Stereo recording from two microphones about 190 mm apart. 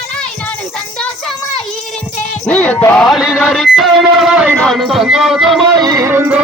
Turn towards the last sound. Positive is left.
turn(degrees=-10)  # may be behind; listen again after turning